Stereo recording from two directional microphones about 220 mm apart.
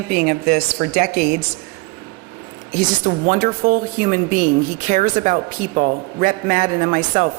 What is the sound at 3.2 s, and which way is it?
A man's voice, 40° right (ahead or behind).